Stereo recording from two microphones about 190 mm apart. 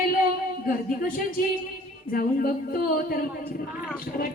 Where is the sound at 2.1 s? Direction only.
50° left (ahead or behind).